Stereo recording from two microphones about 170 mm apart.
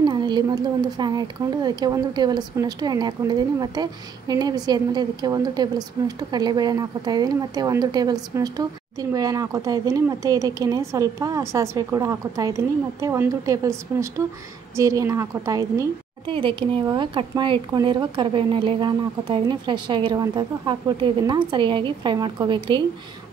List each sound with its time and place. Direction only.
0.0 s speech: 25° right (ahead or behind)
16.3 s speech: 30° right (ahead or behind)